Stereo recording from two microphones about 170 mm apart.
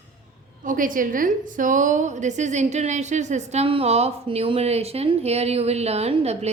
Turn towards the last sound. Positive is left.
turn(degrees=-35)  # may be behind; listen again after turning